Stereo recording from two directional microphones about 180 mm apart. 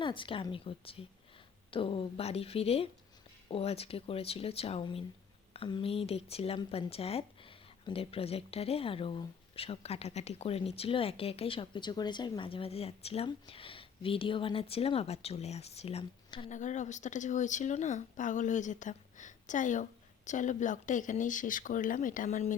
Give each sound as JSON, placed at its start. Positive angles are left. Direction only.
{"t": 0.0, "sound": "speech", "side_deg": 30}
{"t": 16.5, "sound": "speech", "side_deg": 40}